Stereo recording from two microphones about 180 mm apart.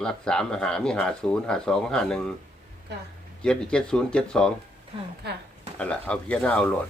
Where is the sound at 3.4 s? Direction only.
5° left (ahead or behind).